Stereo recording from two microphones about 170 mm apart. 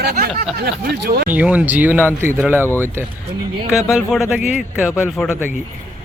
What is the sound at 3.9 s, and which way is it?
Speech, centre (ahead or behind).